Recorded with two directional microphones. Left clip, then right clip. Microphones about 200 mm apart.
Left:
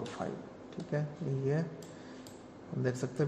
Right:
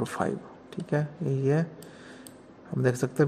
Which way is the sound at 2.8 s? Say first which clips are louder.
Right 9 dB; 40° right (ahead or behind).